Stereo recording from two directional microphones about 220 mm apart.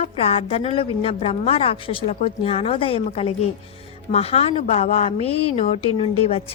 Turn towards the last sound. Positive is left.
turn(degrees=25)  # may be behind; listen again after turning